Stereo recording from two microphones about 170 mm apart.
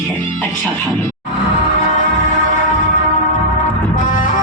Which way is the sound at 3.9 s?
50° left (ahead or behind).